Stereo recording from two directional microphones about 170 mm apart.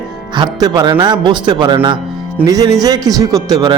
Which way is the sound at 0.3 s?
25° right (ahead or behind).